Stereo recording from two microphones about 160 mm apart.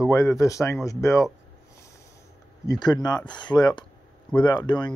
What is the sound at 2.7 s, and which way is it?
Speech, 25° left (ahead or behind).